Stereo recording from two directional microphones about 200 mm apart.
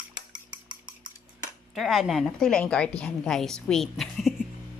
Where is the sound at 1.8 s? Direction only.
Centre (ahead or behind).